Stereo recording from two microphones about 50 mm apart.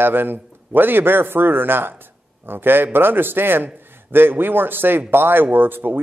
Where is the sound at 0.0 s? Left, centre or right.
Right.